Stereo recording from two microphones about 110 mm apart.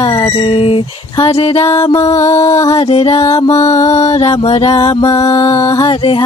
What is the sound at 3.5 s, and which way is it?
Speech, 75° left (ahead or behind).